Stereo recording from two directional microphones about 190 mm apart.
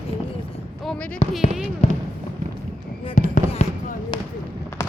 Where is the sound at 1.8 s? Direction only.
40° left (ahead or behind).